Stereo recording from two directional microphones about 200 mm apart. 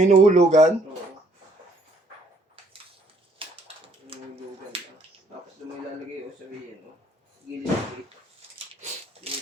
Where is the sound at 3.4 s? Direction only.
25° right (ahead or behind).